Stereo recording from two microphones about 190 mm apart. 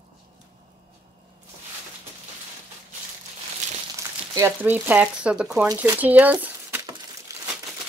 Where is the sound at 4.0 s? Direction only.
15° right (ahead or behind).